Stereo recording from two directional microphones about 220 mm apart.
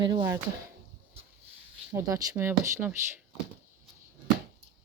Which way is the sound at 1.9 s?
15° right (ahead or behind).